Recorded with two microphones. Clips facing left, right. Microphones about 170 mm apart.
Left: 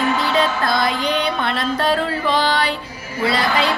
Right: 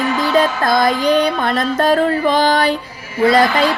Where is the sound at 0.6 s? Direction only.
45° right (ahead or behind).